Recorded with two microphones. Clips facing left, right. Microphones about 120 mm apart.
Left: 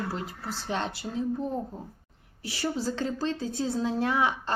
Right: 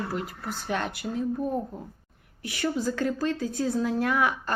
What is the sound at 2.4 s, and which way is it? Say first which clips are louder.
A woman's voice: right 2 dB; 30° left (ahead or behind).